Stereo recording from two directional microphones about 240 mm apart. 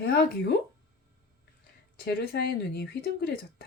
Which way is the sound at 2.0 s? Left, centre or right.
Left.